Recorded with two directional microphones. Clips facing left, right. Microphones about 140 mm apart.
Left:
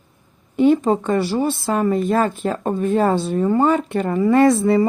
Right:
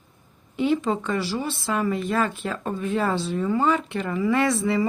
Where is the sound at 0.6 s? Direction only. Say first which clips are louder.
Left 7 dB; 45° left (ahead or behind).